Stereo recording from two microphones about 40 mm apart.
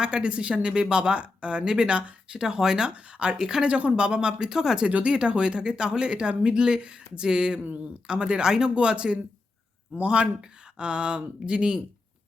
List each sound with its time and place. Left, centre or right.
0.0 s speech: right
1.6 s speech: centre
3.7 s speech: right; by 4.9 s centre
4.9 s speech: right